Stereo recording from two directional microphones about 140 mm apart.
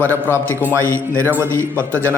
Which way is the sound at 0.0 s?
15° left (ahead or behind).